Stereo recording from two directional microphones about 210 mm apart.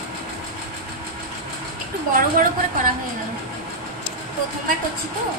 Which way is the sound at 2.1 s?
40° right (ahead or behind).